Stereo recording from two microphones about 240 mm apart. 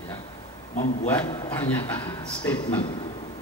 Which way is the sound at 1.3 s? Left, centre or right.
Centre.